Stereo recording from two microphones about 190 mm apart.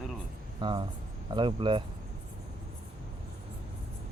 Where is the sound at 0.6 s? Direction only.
25° right (ahead or behind).